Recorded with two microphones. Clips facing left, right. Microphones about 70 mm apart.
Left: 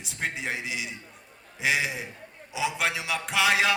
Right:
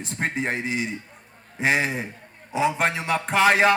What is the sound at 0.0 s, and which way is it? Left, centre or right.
Music, right.